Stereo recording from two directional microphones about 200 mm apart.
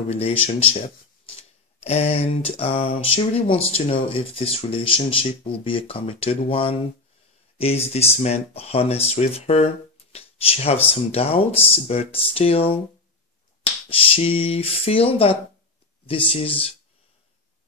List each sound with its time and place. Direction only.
0.1 s speech: 30° left (ahead or behind)
1.8 s speech: 30° left (ahead or behind)
13.8 s speech: 30° left (ahead or behind)